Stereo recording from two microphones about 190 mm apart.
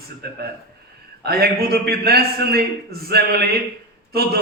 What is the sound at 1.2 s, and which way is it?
A man's voice, 55° right (ahead or behind).